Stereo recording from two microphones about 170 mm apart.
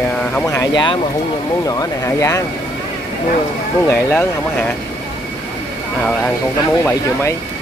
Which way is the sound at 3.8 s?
15° left (ahead or behind).